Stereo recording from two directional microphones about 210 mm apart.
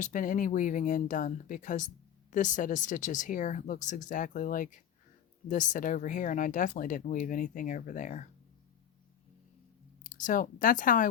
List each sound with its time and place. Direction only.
0.0 s speech: 40° left (ahead or behind)
10.0 s speech: 40° left (ahead or behind)